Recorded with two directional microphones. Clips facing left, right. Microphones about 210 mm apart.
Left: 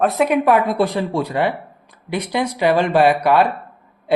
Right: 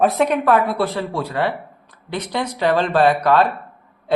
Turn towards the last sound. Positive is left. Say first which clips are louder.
# left 1 dB
turn(degrees=10)  # may be behind; listen again after turning